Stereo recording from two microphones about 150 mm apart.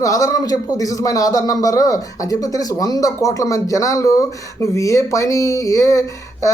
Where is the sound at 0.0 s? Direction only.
20° left (ahead or behind).